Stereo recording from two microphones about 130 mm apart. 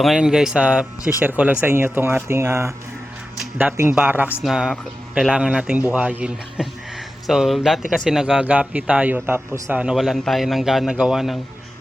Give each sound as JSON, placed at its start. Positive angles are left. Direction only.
{"t": 0.0, "sound": "a man's voice", "side_deg": -5}